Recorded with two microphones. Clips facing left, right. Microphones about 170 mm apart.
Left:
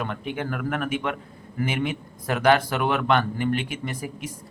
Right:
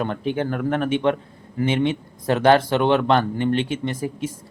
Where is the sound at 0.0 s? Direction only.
30° right (ahead or behind).